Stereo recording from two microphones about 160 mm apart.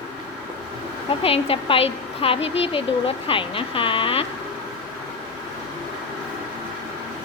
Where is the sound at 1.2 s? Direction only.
35° left (ahead or behind).